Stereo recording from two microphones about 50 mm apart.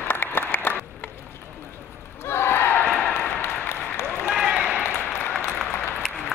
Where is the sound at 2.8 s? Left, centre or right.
Left.